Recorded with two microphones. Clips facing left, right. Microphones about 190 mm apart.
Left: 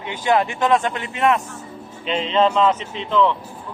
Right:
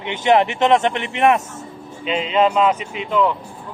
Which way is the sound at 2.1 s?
5° right (ahead or behind).